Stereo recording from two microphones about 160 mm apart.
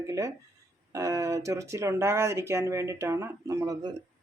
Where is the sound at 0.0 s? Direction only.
20° right (ahead or behind).